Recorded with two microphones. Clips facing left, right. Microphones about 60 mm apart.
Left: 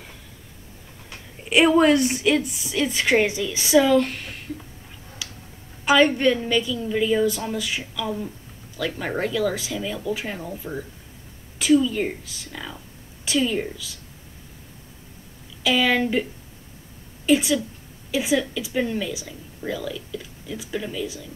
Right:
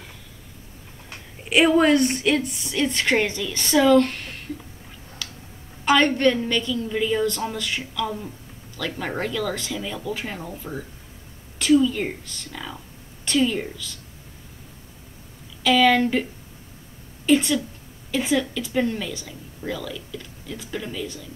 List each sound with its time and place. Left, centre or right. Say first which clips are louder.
1.5 s a woman's voice: left 1 dB; centre
5.9 s a woman's voice: left 1 dB; centre
15.6 s speech: right 3 dB; centre
17.3 s speech: even; centre